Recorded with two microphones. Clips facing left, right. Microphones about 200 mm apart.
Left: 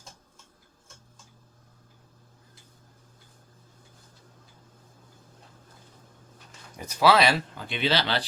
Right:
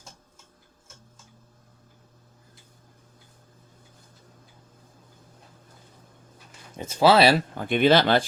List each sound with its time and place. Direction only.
6.7 s speech: 25° right (ahead or behind)
7.5 s speech: 50° right (ahead or behind)